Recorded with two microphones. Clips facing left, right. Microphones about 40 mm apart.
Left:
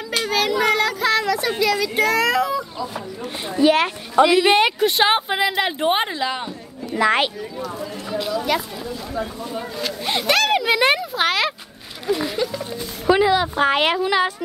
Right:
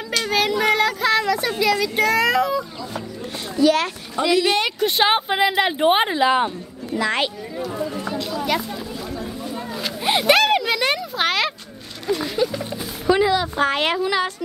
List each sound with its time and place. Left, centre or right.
0.3 s child singing: centre
1.6 s speech: centre
3.5 s speech: left
4.7 s speech: centre; by 7.0 s right
7.0 s speech: centre
7.5 s a sound: centre
8.3 s chatter: centre
9.4 s a sound: centre
10.0 s a sound: centre
10.7 s a child's voice: centre
11.1 s speech: centre
13.1 s speech: centre